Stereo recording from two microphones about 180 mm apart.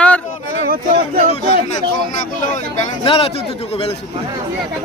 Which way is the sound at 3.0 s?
30° left (ahead or behind).